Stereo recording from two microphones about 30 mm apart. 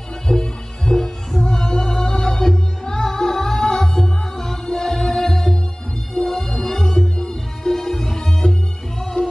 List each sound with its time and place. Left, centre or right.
0.3 s music: centre
0.9 s music: centre
1.4 s music: left
7.2 s music: left